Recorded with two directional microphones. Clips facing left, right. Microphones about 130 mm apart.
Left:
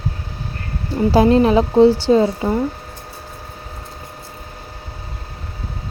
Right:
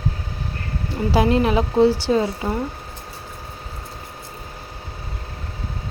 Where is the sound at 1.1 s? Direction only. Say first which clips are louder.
Left 5 dB; 35° left (ahead or behind).